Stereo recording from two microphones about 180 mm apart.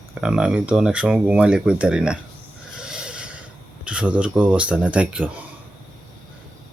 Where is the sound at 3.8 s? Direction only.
5° right (ahead or behind).